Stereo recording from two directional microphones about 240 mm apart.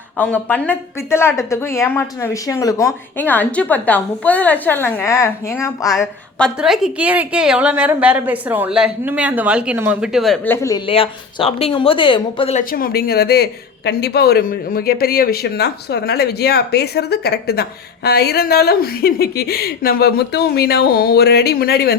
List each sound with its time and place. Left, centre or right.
0.2 s speech: centre
5.9 s a woman's voice: centre; by 12.6 s left
12.7 s speech: left